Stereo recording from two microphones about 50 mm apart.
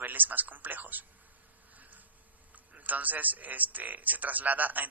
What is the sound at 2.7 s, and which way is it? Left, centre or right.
A man's voice, right.